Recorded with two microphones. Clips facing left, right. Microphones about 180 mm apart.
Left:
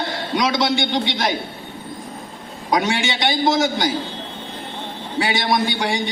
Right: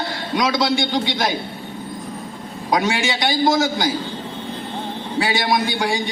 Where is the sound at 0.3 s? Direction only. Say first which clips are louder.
Even; 25° left (ahead or behind).